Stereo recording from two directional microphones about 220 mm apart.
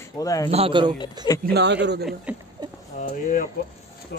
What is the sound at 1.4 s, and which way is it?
Speech, 50° right (ahead or behind).